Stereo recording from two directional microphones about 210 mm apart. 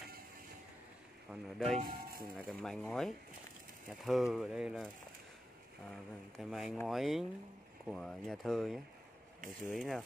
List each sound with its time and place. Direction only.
1.3 s speech: centre (ahead or behind)
1.8 s speech: 45° right (ahead or behind)
2.3 s speech: centre (ahead or behind)
6.3 s speech: centre (ahead or behind)